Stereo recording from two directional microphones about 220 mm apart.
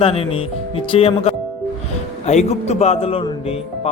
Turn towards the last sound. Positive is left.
turn(degrees=25)  # may be behind; listen again after turning